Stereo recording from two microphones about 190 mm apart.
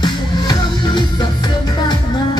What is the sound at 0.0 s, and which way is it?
Music, 25° left (ahead or behind).